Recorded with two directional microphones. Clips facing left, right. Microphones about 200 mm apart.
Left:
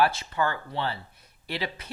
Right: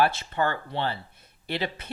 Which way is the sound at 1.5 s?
25° right (ahead or behind).